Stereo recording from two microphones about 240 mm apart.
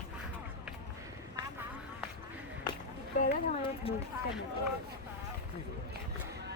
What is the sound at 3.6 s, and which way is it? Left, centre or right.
Run, left.